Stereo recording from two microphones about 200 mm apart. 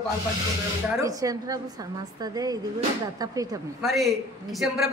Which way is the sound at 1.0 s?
15° right (ahead or behind).